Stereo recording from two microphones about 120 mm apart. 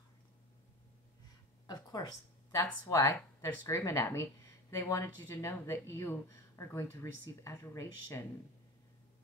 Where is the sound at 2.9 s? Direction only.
25° left (ahead or behind).